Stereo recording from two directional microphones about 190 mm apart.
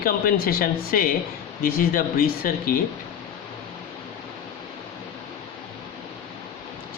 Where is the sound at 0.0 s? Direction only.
50° left (ahead or behind).